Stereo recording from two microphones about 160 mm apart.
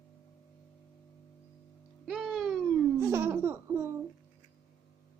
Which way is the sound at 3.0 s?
15° right (ahead or behind).